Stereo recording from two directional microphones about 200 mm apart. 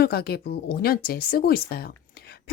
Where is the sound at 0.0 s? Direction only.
50° left (ahead or behind).